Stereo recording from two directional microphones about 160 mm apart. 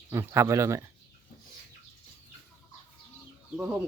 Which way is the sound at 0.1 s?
15° right (ahead or behind).